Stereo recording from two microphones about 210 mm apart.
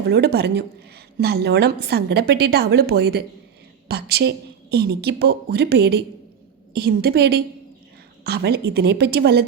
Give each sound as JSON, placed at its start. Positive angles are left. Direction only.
{"t": 0.1, "sound": "a woman's voice", "side_deg": -50}